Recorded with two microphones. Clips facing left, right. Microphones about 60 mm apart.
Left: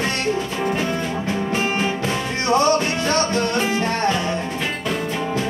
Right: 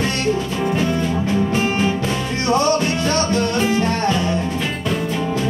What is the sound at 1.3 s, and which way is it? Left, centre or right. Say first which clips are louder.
Music: right 3 dB; centre.